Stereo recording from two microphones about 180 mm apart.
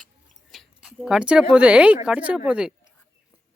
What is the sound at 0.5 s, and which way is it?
A woman's voice, centre (ahead or behind).